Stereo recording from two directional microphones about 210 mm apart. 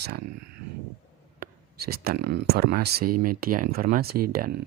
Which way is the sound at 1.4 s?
45° right (ahead or behind).